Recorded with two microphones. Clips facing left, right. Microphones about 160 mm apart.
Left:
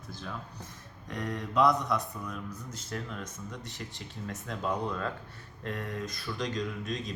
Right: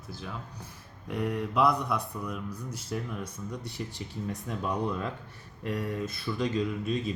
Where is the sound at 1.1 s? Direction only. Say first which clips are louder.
Right 4 dB; 10° right (ahead or behind).